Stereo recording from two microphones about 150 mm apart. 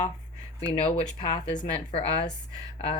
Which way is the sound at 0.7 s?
35° left (ahead or behind).